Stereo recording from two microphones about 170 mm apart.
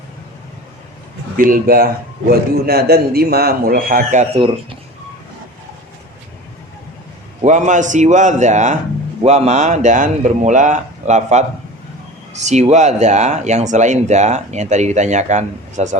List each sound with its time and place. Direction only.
1.4 s a man's voice: 55° right (ahead or behind); by 4.8 s 30° right (ahead or behind)
7.4 s speech: 45° right (ahead or behind)